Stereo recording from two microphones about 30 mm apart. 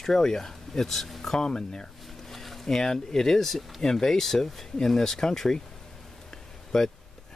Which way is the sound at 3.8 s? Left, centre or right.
Centre.